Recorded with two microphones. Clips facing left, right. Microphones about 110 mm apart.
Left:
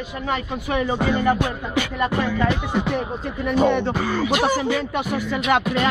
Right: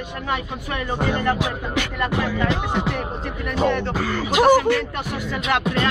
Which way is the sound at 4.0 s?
15° left (ahead or behind).